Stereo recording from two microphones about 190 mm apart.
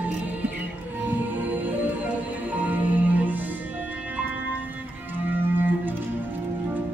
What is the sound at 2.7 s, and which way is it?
Music, 10° right (ahead or behind).